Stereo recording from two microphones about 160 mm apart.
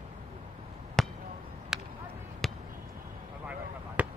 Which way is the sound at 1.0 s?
5° left (ahead or behind).